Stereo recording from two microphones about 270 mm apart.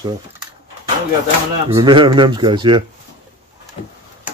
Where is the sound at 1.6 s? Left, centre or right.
Centre.